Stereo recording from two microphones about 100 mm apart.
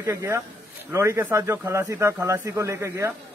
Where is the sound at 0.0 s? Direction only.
30° right (ahead or behind).